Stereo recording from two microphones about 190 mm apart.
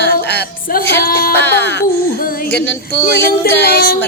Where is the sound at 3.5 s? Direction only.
60° left (ahead or behind).